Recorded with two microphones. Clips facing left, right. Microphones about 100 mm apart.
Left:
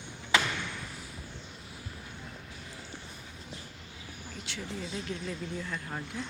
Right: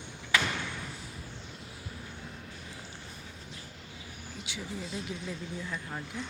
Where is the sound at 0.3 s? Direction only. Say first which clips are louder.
Left 1 dB; 25° left (ahead or behind).